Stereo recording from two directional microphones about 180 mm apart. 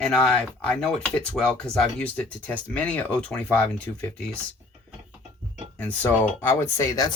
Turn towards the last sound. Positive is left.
turn(degrees=20)  # may be behind; listen again after turning